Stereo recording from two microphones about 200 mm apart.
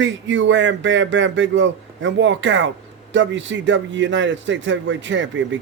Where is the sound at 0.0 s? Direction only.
65° right (ahead or behind).